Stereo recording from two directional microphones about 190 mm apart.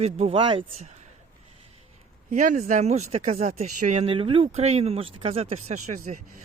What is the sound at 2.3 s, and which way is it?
Speech, 45° right (ahead or behind).